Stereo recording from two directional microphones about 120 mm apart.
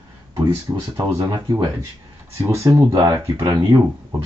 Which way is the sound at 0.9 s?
25° right (ahead or behind).